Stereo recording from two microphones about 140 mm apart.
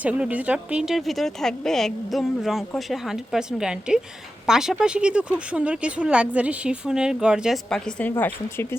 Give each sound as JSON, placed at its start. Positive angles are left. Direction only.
{"t": 0.0, "sound": "speech", "side_deg": -10}